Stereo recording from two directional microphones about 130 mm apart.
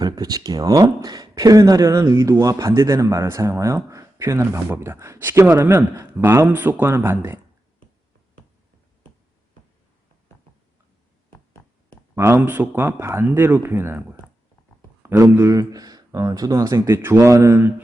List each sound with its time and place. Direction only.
0.0 s speech: 30° right (ahead or behind)
12.1 s speech: 20° right (ahead or behind)